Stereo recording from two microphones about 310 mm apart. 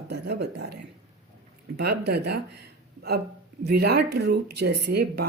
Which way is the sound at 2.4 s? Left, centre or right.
Right.